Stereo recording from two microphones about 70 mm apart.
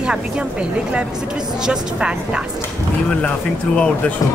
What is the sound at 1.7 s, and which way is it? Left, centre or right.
Speech, centre.